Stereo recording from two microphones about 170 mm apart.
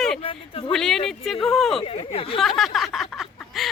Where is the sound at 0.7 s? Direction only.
Centre (ahead or behind).